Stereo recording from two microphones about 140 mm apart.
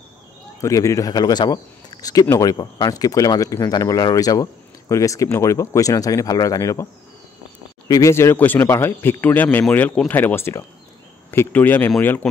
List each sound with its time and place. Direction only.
0.6 s speech: 20° left (ahead or behind)
7.9 s a man's voice: 20° left (ahead or behind)